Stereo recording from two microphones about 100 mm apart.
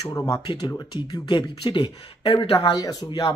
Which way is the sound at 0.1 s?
35° left (ahead or behind).